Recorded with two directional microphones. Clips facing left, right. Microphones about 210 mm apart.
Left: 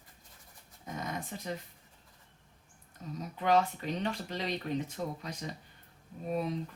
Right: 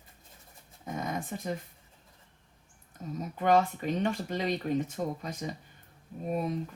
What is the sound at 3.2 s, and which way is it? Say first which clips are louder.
Speech: right 3 dB; 50° right (ahead or behind).